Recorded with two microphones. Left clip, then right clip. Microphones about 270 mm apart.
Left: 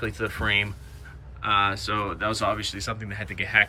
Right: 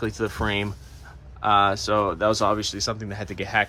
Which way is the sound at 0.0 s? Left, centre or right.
Centre.